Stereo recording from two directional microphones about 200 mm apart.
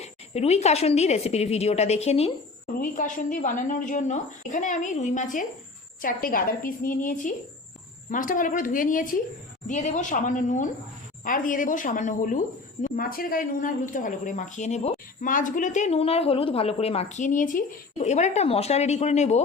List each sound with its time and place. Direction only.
0.0 s a woman's voice: 30° left (ahead or behind)
2.7 s a woman's voice: 40° left (ahead or behind)